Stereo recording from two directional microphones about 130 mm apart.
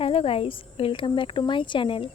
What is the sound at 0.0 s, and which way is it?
Speech, 45° left (ahead or behind).